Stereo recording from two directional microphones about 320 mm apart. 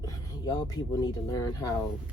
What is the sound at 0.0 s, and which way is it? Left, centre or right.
Speech, centre.